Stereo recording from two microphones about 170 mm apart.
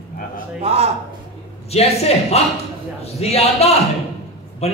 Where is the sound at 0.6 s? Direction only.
35° right (ahead or behind).